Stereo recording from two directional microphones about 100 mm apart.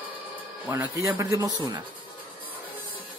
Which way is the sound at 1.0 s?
30° right (ahead or behind).